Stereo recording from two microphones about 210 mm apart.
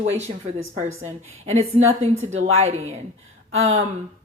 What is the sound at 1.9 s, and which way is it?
Speech, 70° right (ahead or behind).